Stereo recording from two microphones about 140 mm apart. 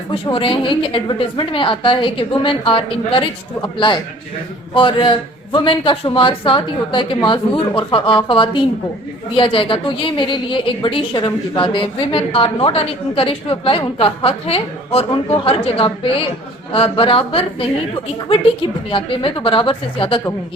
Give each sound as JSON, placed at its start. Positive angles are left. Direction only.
{"t": 0.1, "sound": "a woman's voice", "side_deg": 40}